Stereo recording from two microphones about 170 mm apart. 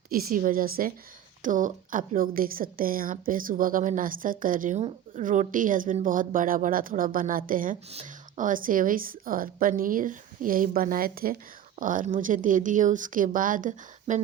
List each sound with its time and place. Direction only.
0.1 s a woman's voice: 60° right (ahead or behind)
7.9 s a woman's voice: 45° right (ahead or behind)